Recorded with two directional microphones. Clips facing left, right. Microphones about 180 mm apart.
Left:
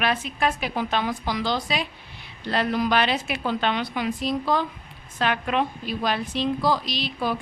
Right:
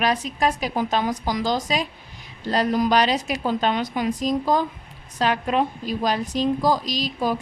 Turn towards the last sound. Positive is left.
turn(degrees=-40)  # may be behind; listen again after turning